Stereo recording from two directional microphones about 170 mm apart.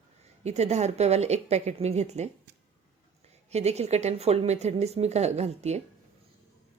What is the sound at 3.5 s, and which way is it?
Speech, 40° right (ahead or behind).